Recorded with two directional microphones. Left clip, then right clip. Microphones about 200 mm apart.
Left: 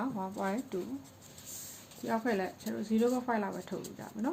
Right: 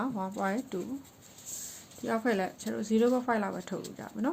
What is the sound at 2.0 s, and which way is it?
Speech, 35° right (ahead or behind).